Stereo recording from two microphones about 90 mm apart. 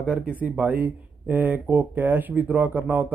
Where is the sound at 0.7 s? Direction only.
20° right (ahead or behind).